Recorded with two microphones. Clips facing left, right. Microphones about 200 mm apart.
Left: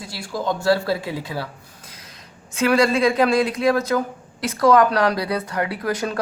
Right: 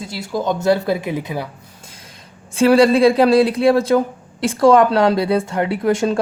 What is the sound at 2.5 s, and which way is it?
Speech, 30° right (ahead or behind).